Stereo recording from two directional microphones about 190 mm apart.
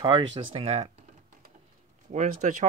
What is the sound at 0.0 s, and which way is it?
Speech, 25° right (ahead or behind).